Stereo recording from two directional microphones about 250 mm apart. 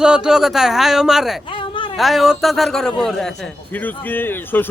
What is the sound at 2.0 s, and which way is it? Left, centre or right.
A man's voice, centre.